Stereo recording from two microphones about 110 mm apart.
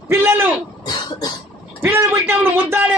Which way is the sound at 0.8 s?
40° left (ahead or behind).